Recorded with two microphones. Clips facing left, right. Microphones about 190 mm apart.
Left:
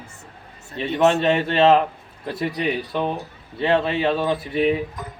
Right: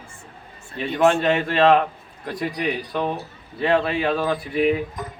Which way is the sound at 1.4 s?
25° left (ahead or behind).